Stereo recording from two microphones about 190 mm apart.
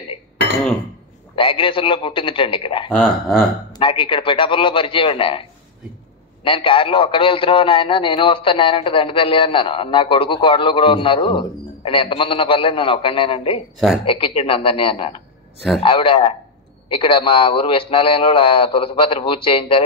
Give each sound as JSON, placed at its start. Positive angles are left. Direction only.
{"t": 1.3, "sound": "a man's voice", "side_deg": 25}
{"t": 2.9, "sound": "speech", "side_deg": 0}
{"t": 3.7, "sound": "a man's voice", "side_deg": 25}
{"t": 6.4, "sound": "a man's voice", "side_deg": 25}